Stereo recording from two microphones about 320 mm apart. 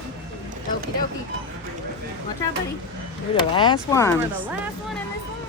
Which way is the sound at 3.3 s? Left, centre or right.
Centre.